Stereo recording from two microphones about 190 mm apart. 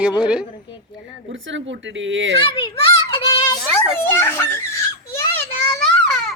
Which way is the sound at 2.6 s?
30° left (ahead or behind).